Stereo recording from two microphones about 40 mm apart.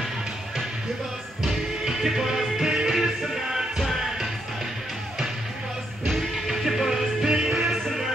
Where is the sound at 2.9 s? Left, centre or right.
Centre.